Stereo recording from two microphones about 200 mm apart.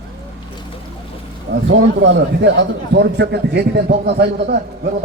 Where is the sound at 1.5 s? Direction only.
55° right (ahead or behind).